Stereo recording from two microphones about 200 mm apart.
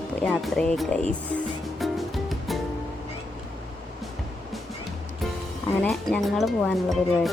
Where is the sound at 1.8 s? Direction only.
Centre (ahead or behind).